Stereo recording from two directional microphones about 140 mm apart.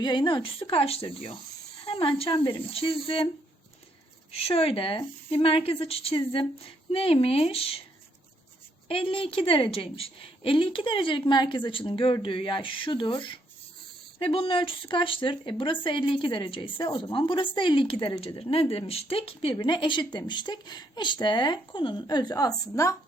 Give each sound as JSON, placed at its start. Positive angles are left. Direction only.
{"t": 0.0, "sound": "speech", "side_deg": 35}
{"t": 4.3, "sound": "speech", "side_deg": 45}
{"t": 8.9, "sound": "speech", "side_deg": 40}